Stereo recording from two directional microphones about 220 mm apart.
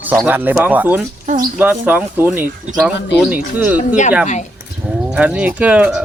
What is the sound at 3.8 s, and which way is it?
Speech, 35° left (ahead or behind).